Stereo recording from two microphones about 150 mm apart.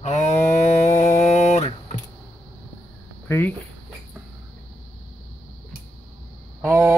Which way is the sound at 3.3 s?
15° left (ahead or behind).